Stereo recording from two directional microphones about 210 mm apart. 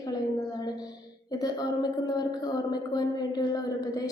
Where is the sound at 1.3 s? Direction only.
20° left (ahead or behind).